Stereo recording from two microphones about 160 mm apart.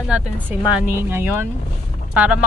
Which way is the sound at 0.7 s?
10° right (ahead or behind).